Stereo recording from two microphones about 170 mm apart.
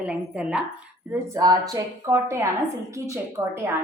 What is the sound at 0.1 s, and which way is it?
Speech, 5° right (ahead or behind).